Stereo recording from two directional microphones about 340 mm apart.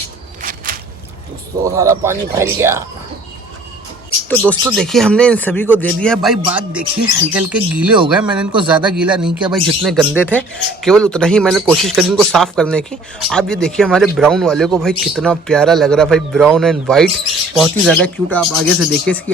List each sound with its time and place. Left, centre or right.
0.4 s a sound: right
1.6 s speech: centre
4.3 s speech: centre